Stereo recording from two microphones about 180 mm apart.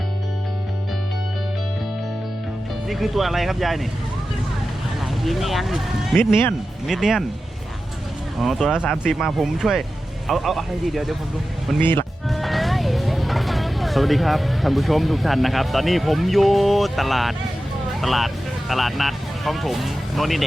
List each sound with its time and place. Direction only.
2.9 s speech: centre (ahead or behind)
5.2 s speech: centre (ahead or behind)
6.1 s speech: 10° left (ahead or behind)
6.8 s speech: centre (ahead or behind)
8.4 s speech: centre (ahead or behind)
11.8 s speech: 10° left (ahead or behind)
12.3 s speech: centre (ahead or behind)